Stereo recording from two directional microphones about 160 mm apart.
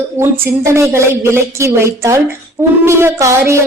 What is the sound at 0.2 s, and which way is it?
Speech, 15° right (ahead or behind).